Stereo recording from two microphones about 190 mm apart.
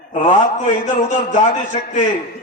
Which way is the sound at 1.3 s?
40° left (ahead or behind).